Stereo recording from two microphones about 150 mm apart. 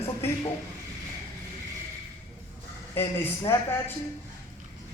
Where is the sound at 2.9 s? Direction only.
15° left (ahead or behind).